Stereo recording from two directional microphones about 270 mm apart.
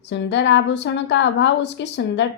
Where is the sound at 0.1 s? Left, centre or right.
Left.